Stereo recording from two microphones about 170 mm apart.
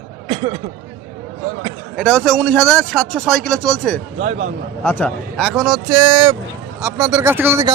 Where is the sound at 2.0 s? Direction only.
5° left (ahead or behind).